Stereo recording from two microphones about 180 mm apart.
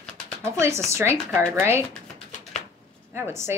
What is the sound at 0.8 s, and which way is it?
Speech, 15° right (ahead or behind).